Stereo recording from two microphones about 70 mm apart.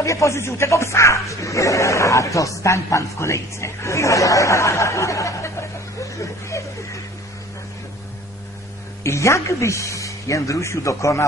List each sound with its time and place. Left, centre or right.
0.0 s speech: left
6.5 s a sound: left
9.0 s speech: left